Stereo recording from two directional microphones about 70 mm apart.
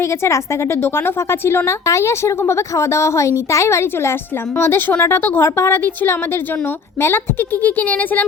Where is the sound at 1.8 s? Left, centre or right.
Left.